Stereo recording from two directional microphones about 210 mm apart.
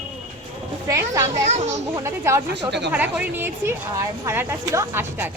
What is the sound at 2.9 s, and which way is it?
A woman's voice, 10° right (ahead or behind).